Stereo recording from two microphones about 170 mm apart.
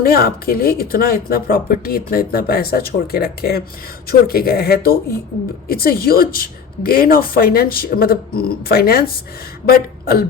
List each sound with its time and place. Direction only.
0.0 s speech: 65° left (ahead or behind)